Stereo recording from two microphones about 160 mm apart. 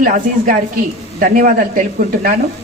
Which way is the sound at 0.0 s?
60° right (ahead or behind).